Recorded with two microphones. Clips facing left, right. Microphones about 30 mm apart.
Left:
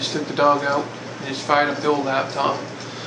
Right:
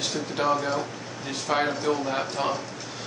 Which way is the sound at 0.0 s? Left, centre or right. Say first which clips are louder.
Left 8 dB; left.